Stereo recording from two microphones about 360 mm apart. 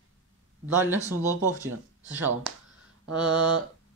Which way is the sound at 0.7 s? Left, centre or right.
Centre.